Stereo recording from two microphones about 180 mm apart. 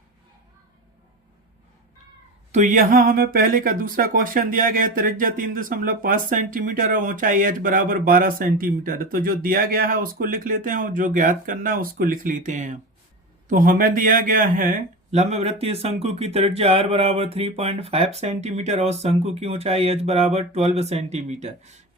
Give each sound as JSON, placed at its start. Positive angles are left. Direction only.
{"t": 2.5, "sound": "a man's voice", "side_deg": -45}